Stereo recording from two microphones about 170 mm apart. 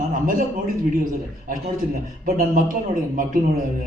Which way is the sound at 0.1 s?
55° right (ahead or behind).